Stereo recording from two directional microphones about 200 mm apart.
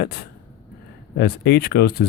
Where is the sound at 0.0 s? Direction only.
50° left (ahead or behind).